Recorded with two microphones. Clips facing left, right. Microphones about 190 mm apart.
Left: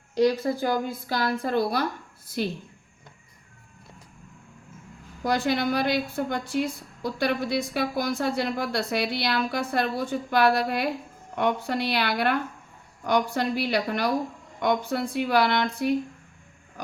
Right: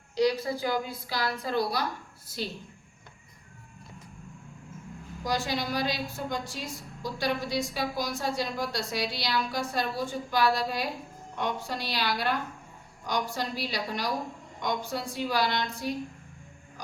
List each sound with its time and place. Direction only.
0.2 s a woman's voice: 50° left (ahead or behind)
5.2 s a woman's voice: 60° left (ahead or behind)